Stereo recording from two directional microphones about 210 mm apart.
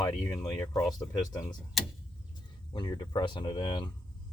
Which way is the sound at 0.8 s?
20° left (ahead or behind).